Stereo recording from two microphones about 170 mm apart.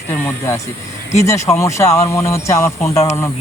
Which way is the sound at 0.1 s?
15° left (ahead or behind).